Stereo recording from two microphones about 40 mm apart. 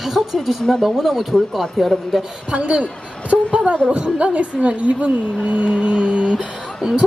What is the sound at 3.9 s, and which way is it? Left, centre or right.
A woman's voice, right.